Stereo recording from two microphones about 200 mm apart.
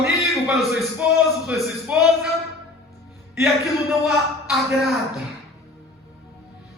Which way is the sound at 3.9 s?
Centre (ahead or behind).